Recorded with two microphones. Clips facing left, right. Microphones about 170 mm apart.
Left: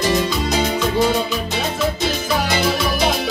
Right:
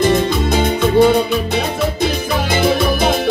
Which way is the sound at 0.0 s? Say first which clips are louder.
Right 4 dB; 55° right (ahead or behind).